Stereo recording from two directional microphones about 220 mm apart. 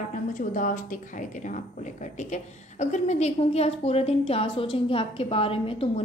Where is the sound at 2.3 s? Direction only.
35° left (ahead or behind).